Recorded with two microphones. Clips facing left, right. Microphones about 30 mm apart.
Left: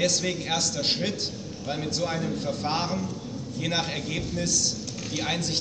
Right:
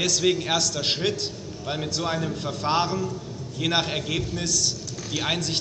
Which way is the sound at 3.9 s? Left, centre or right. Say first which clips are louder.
Right 3 dB; right.